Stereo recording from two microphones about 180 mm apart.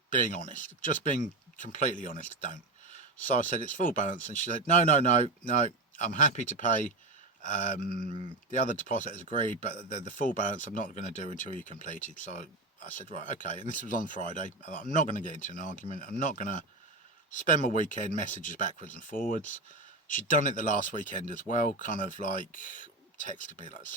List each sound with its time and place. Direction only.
0.1 s speech: 50° left (ahead or behind)